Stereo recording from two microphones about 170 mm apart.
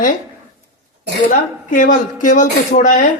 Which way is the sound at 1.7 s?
50° left (ahead or behind).